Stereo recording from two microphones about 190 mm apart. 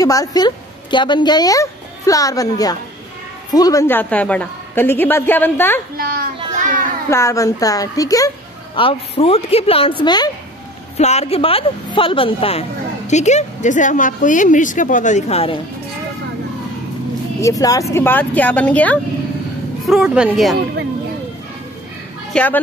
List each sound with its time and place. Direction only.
0.0 s a woman's voice: 20° left (ahead or behind)
5.9 s children playing: 50° right (ahead or behind)
6.5 s a sound: 45° right (ahead or behind)
7.1 s a woman's voice: 15° left (ahead or behind)
8.7 s a woman's voice: 30° left (ahead or behind)
11.0 s a woman's voice: 35° left (ahead or behind)
17.4 s a woman's voice: 15° left (ahead or behind)
19.9 s a woman's voice: 5° right (ahead or behind)
22.3 s speech: 10° left (ahead or behind)